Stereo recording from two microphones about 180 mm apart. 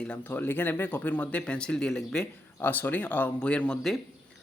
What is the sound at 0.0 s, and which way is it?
Speech, 10° left (ahead or behind).